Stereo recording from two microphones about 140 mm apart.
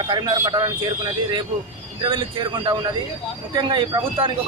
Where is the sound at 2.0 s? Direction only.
35° right (ahead or behind).